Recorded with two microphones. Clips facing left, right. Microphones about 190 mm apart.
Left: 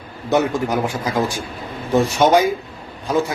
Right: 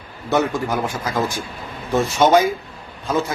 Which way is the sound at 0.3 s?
15° left (ahead or behind).